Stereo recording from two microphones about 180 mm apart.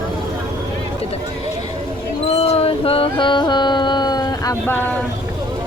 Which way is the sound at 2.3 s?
35° left (ahead or behind).